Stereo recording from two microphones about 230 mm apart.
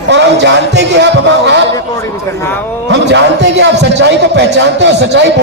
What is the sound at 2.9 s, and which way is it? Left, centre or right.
A man's voice, right.